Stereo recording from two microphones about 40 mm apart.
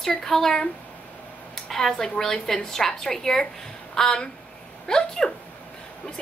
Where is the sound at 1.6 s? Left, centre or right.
Centre.